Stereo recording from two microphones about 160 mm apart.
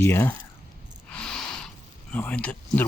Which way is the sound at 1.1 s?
5° left (ahead or behind).